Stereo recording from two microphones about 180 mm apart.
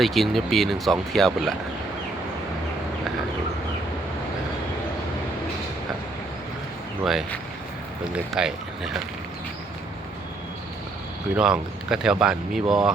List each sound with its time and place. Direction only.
0.0 s speech: centre (ahead or behind)
7.0 s speech: centre (ahead or behind)
11.3 s speech: 5° right (ahead or behind)
12.6 s speech: 25° right (ahead or behind)